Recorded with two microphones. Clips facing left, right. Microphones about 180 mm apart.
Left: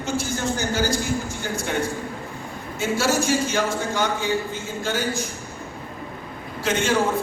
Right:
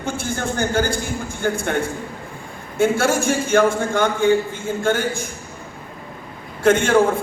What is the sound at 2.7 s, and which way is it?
A man's voice, 55° right (ahead or behind).